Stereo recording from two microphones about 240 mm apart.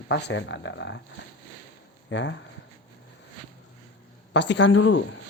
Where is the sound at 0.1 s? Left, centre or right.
Left.